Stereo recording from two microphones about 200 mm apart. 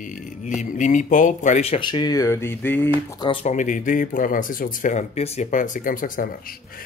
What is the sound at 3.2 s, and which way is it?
Speech, 25° left (ahead or behind).